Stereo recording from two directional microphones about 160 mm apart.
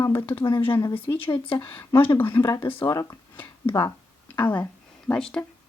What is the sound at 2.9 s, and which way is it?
Speech, 20° left (ahead or behind).